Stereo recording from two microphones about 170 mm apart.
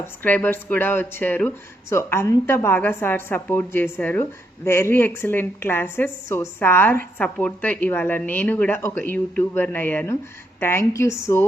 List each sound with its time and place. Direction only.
0.0 s speech: 10° left (ahead or behind)